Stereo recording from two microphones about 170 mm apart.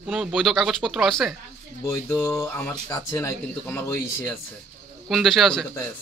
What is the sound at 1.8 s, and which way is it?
Speech, 10° left (ahead or behind).